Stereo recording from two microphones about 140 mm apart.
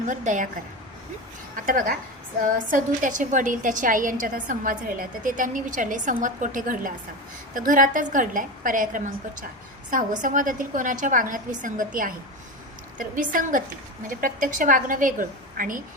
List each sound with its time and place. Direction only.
0.1 s a woman's voice: 65° right (ahead or behind)
1.6 s a woman's voice: 80° right